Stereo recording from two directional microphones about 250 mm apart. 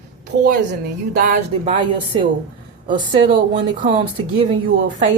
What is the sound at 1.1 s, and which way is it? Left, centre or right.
Speech, right.